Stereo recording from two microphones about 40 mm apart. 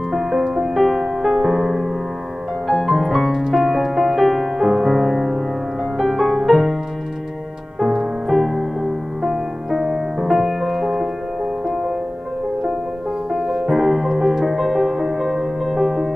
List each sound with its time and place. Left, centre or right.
0.1 s music: centre
7.8 s music: centre
8.3 s music: centre
13.3 s music: centre